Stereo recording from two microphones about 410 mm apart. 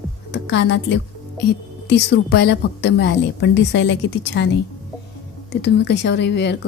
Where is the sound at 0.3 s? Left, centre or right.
Left.